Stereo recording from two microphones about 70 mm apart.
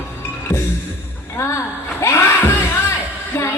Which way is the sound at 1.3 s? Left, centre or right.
Left.